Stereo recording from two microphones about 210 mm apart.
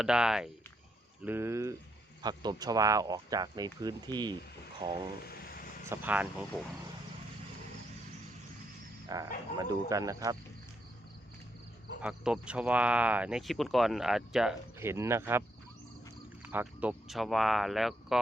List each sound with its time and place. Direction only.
0.0 s speech: 5° right (ahead or behind)
9.0 s wild animals: 15° right (ahead or behind)
9.6 s speech: 15° right (ahead or behind)
12.0 s speech: 5° right (ahead or behind)